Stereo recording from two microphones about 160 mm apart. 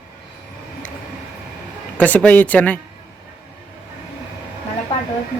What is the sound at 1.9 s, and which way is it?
Speech, 10° left (ahead or behind).